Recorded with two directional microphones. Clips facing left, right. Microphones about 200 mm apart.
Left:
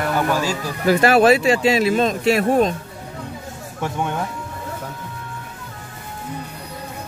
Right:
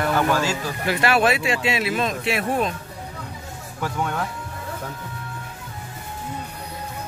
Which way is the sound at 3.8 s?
20° left (ahead or behind).